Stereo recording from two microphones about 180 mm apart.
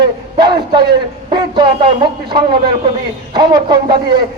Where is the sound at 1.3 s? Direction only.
25° right (ahead or behind).